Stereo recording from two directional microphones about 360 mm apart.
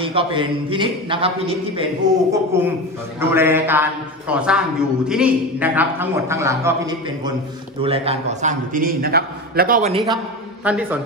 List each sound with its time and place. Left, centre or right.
0.0 s a man's voice: centre
2.3 s a man's voice: centre
10.6 s a man's voice: centre